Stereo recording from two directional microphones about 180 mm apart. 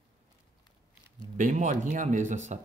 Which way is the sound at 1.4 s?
45° right (ahead or behind).